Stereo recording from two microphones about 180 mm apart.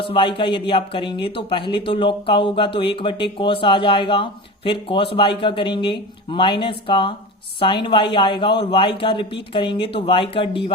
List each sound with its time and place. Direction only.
0.0 s a man's voice: 30° left (ahead or behind)